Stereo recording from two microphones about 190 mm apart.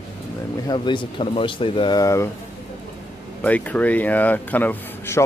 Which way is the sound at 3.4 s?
10° left (ahead or behind).